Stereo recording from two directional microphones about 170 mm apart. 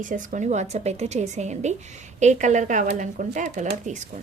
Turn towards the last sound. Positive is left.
turn(degrees=-45)  # may be behind; listen again after turning